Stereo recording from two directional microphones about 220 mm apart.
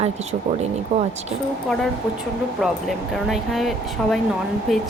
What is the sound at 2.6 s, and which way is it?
Speech, centre (ahead or behind).